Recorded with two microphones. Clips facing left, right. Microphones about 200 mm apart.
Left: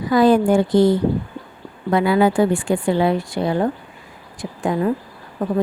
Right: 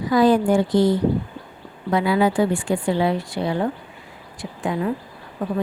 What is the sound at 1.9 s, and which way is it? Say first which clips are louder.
A woman's voice: left 3 dB; 55° left (ahead or behind).